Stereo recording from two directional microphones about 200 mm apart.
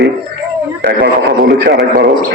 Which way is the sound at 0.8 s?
60° right (ahead or behind).